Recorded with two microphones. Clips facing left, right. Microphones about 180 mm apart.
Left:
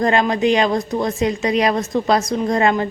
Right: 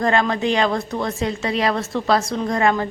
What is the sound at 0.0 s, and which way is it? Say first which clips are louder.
Speech: left 3 dB; 20° left (ahead or behind).